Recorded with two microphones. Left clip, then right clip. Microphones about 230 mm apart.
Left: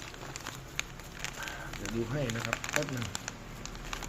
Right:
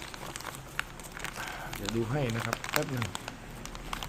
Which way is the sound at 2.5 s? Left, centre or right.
Centre.